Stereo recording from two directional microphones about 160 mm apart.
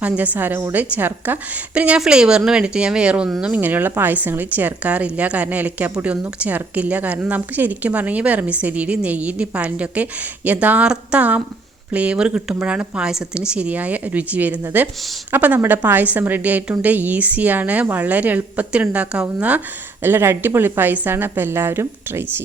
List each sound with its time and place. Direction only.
0.0 s a woman's voice: 10° right (ahead or behind)